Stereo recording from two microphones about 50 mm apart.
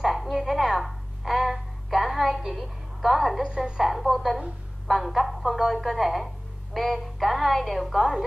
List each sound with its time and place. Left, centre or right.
0.0 s a sound: centre
3.4 s a woman's voice: centre
3.8 s a woman's voice: centre